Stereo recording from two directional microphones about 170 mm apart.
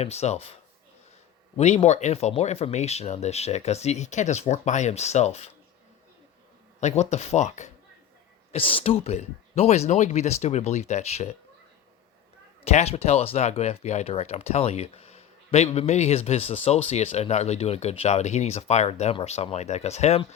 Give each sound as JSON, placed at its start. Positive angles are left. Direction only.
{"t": 0.0, "sound": "speech", "side_deg": 40}
{"t": 1.5, "sound": "speech", "side_deg": 40}
{"t": 6.7, "sound": "speech", "side_deg": 40}
{"t": 8.5, "sound": "speech", "side_deg": 35}
{"t": 12.7, "sound": "speech", "side_deg": 35}